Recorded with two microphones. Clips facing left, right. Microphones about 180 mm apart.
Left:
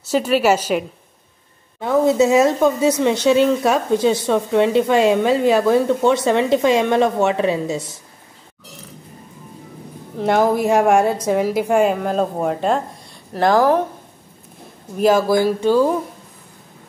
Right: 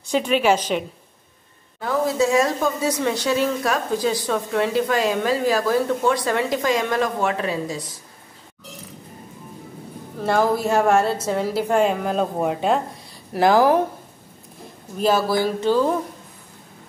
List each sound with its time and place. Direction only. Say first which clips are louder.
0.0 s a woman's voice: left 3 dB; 5° left (ahead or behind)
1.8 s speech: left 6 dB; 20° left (ahead or behind)
10.2 s a woman's voice: left 4 dB; 20° left (ahead or behind); by 13.7 s 5° right (ahead or behind)
15.0 s a woman's voice: left 5 dB; 10° left (ahead or behind)